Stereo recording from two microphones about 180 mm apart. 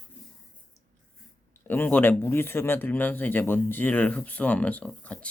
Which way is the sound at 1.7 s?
10° left (ahead or behind).